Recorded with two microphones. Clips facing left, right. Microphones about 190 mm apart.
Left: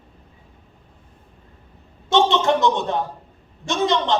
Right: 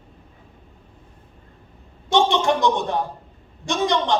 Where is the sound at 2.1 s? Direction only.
15° right (ahead or behind).